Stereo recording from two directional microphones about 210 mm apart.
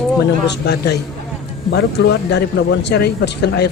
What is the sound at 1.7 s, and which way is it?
Speech, 50° left (ahead or behind).